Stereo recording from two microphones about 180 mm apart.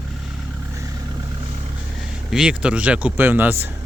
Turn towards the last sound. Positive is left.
turn(degrees=-10)  # may be behind; listen again after turning